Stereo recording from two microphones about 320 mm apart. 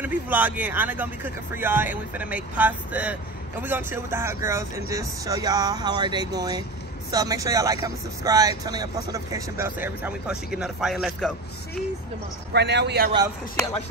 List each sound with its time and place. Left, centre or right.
0.0 s speech: centre
12.5 s a man's voice: right